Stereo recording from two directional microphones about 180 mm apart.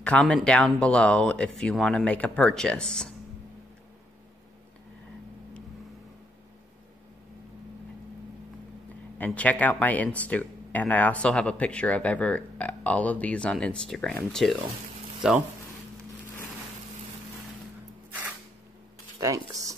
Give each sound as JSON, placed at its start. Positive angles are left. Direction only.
{"t": 0.0, "sound": "speech", "side_deg": 5}
{"t": 9.2, "sound": "speech", "side_deg": 10}
{"t": 19.1, "sound": "speech", "side_deg": -20}